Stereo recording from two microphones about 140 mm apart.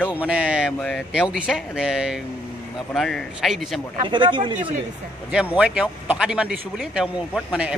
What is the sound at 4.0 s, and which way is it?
Speech, 35° right (ahead or behind).